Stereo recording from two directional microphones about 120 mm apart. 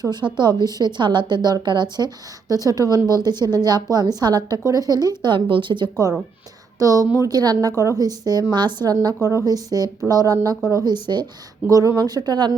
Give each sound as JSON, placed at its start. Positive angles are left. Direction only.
{"t": 0.0, "sound": "speech", "side_deg": -35}